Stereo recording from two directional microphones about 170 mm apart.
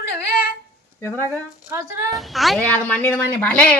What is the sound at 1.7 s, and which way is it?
Speech, 15° right (ahead or behind).